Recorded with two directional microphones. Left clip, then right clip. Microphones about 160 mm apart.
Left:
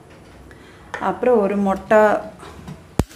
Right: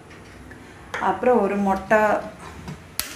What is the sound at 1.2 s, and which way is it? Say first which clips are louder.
A woman's voice: left 4 dB; 65° left (ahead or behind).